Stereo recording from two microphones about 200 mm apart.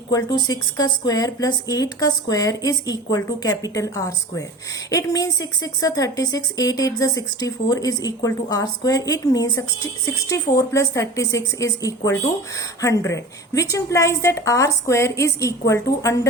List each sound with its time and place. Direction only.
0.1 s a woman's voice: 20° left (ahead or behind)